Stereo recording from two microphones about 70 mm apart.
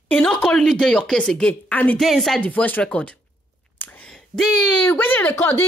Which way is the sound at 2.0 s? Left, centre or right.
Centre.